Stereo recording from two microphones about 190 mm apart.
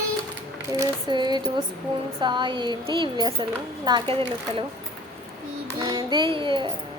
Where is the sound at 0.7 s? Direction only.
20° right (ahead or behind).